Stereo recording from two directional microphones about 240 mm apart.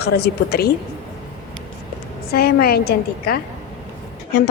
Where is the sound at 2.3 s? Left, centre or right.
Left.